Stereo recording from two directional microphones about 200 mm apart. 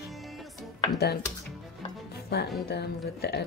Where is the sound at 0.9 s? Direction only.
55° left (ahead or behind).